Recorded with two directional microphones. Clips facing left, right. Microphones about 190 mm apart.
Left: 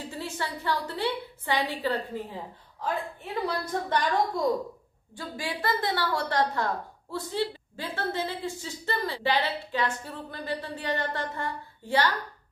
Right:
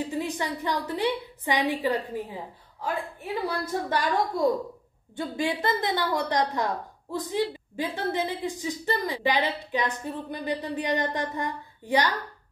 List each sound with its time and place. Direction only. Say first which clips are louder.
0.1 s a woman's voice: right 5 dB; 15° right (ahead or behind)
5.1 s a woman's voice: right 6 dB; 20° right (ahead or behind)